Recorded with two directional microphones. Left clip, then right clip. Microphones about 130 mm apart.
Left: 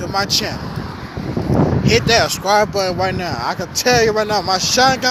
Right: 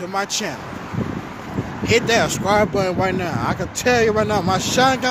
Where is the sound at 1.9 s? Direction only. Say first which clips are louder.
Left 1 dB; 15° right (ahead or behind).